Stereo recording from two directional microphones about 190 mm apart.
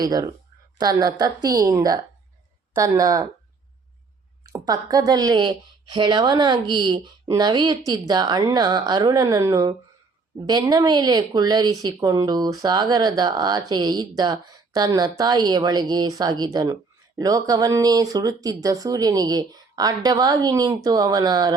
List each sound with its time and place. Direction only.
0.0 s speech: 20° right (ahead or behind)
4.4 s speech: 20° right (ahead or behind)